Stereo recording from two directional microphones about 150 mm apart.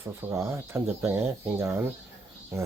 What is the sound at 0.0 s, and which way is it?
Speech, 15° right (ahead or behind).